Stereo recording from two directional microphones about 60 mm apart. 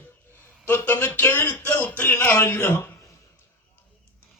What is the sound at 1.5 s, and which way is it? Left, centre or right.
Speech, left.